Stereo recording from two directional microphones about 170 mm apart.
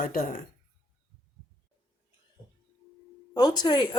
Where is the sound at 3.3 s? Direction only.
25° left (ahead or behind).